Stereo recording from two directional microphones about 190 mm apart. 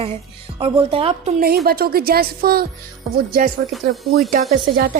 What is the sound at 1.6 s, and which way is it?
Speech, 55° right (ahead or behind).